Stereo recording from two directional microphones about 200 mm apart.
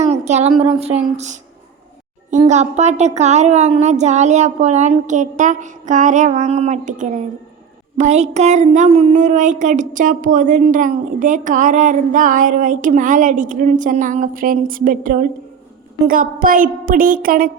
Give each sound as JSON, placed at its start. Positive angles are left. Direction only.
{"t": 0.0, "sound": "a sound", "side_deg": -35}
{"t": 0.8, "sound": "speech", "side_deg": -30}
{"t": 2.4, "sound": "speech", "side_deg": -35}